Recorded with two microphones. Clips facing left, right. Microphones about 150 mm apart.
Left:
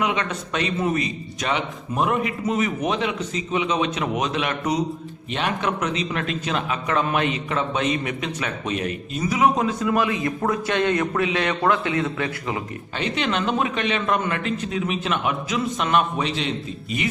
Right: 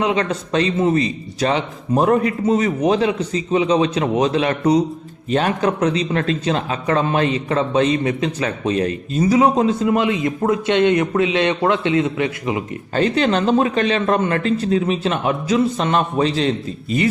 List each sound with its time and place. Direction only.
0.0 s a man's voice: 30° right (ahead or behind)
12.9 s a man's voice: 40° right (ahead or behind)